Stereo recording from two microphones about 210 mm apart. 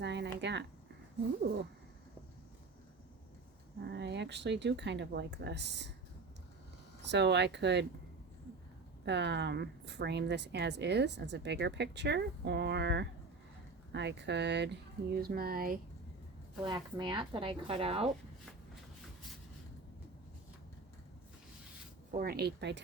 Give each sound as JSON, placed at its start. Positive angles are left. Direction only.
{"t": 0.0, "sound": "a sound", "side_deg": -55}
{"t": 3.8, "sound": "a woman's voice", "side_deg": -55}
{"t": 7.1, "sound": "a woman's voice", "side_deg": -55}
{"t": 9.0, "sound": "a woman's voice", "side_deg": -55}
{"t": 16.6, "sound": "speech", "side_deg": -20}
{"t": 22.2, "sound": "speech", "side_deg": -50}